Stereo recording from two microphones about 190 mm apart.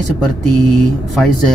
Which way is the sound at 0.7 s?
Centre (ahead or behind).